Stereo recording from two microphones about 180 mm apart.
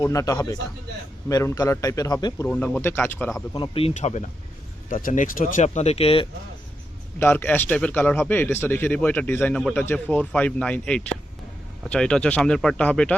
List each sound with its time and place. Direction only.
0.0 s a man's voice: 20° left (ahead or behind)
2.5 s a man's voice: 5° left (ahead or behind); by 6.2 s 35° left (ahead or behind)
7.2 s a man's voice: 10° left (ahead or behind)